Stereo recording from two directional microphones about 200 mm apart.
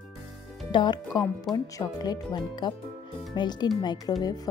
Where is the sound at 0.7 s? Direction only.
25° left (ahead or behind).